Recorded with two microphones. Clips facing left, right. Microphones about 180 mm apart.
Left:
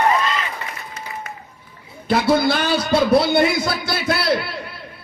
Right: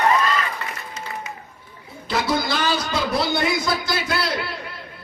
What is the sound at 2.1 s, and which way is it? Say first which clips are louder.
A man's voice: left 6 dB; 60° left (ahead or behind).